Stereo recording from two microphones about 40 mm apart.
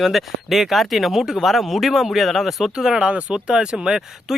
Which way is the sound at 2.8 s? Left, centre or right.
Centre.